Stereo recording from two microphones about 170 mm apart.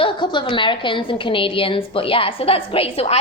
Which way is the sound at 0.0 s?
25° left (ahead or behind).